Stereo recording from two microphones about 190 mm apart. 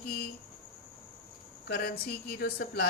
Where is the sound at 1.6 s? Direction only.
55° left (ahead or behind).